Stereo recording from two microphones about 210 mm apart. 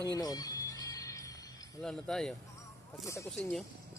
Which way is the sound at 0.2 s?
15° left (ahead or behind).